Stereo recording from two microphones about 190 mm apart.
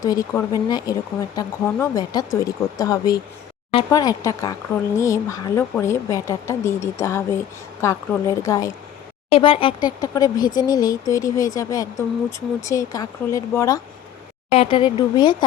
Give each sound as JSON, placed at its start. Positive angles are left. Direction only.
{"t": 0.0, "sound": "speech", "side_deg": 20}
{"t": 9.3, "sound": "speech", "side_deg": 30}
{"t": 14.5, "sound": "speech", "side_deg": 30}